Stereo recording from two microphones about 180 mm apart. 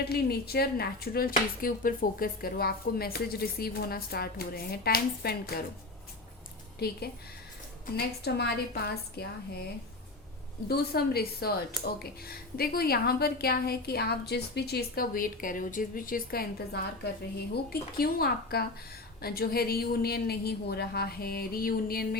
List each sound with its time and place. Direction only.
0.0 s speech: 60° left (ahead or behind)
6.7 s speech: 60° left (ahead or behind)
10.7 s speech: 60° left (ahead or behind)